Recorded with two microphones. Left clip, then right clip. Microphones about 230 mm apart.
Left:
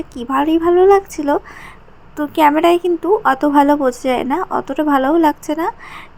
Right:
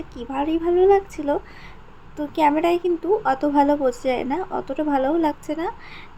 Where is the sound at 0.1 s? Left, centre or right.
Centre.